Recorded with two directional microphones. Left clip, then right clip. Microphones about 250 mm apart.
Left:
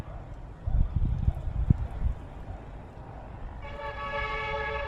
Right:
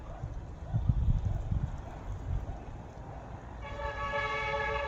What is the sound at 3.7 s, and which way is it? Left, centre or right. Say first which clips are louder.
Vehicle: left 1 dB; left.